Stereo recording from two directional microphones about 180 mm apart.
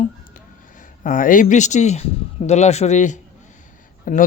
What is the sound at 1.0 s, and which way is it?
Speech, 45° left (ahead or behind).